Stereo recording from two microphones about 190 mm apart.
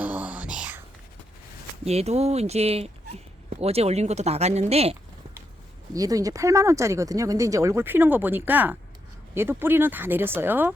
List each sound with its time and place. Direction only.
0.0 s whispering: 10° right (ahead or behind)
1.8 s speech: 35° right (ahead or behind)
5.9 s speech: 20° right (ahead or behind)